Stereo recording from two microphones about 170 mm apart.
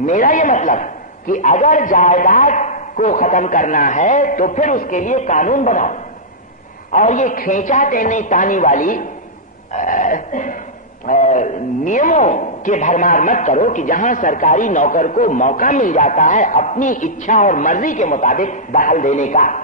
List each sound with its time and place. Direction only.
0.0 s a man's voice: 50° left (ahead or behind)